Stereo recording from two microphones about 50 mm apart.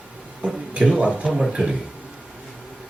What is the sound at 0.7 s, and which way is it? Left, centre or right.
Speech, right.